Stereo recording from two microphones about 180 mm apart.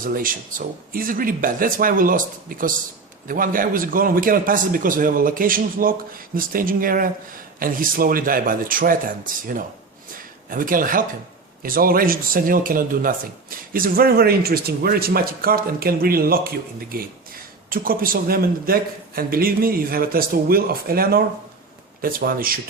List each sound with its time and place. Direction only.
0.0 s a man's voice: 50° right (ahead or behind)
17.7 s a man's voice: 55° right (ahead or behind)